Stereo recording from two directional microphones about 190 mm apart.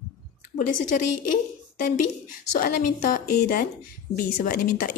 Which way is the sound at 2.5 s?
45° left (ahead or behind).